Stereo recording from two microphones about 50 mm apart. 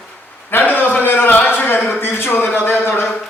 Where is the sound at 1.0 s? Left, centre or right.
Left.